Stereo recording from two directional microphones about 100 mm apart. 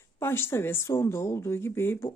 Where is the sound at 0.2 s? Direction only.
25° left (ahead or behind).